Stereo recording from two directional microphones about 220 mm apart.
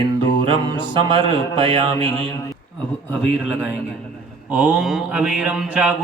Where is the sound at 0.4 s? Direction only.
20° right (ahead or behind).